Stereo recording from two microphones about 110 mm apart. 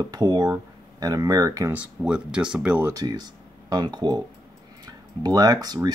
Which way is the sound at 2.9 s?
35° right (ahead or behind).